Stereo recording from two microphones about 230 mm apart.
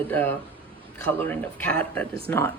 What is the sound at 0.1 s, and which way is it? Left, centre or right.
Speech, centre.